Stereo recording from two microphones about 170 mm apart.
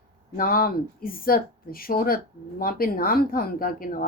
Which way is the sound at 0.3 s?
55° left (ahead or behind).